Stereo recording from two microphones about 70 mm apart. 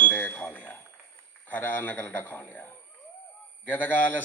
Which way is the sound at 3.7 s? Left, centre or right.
Left.